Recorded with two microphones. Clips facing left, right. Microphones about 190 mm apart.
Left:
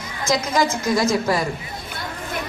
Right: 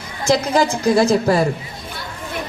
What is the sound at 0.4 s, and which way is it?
A woman's voice, 35° right (ahead or behind).